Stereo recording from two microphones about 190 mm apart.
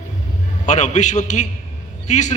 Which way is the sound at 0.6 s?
40° left (ahead or behind).